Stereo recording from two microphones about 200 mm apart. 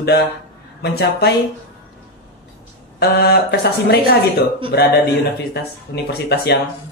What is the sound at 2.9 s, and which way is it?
Speech, 55° left (ahead or behind).